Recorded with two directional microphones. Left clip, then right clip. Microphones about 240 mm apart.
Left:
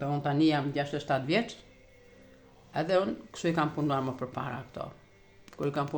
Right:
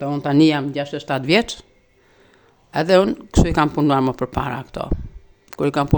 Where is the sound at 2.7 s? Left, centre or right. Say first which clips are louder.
Right 12 dB; right.